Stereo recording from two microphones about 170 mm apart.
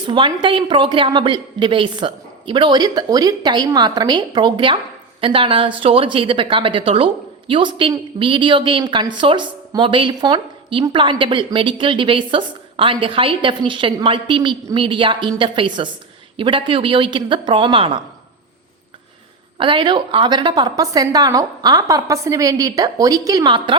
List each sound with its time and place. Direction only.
0.0 s a woman's voice: 25° right (ahead or behind)
19.5 s a woman's voice: 30° right (ahead or behind)